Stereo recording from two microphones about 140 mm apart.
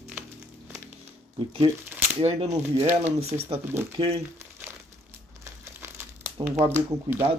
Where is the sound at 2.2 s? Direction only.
50° right (ahead or behind).